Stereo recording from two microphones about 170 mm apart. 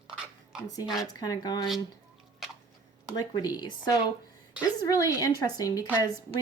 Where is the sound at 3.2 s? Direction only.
25° left (ahead or behind).